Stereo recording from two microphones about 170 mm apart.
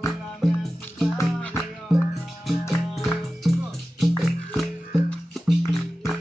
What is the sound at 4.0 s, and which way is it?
Music, centre (ahead or behind).